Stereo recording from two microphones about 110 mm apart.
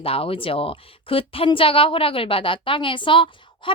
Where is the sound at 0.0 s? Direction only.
60° left (ahead or behind).